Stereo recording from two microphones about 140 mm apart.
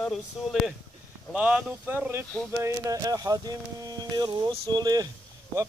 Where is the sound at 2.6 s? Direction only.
25° right (ahead or behind).